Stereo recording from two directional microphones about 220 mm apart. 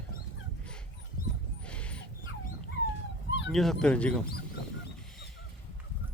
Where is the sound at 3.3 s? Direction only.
55° left (ahead or behind).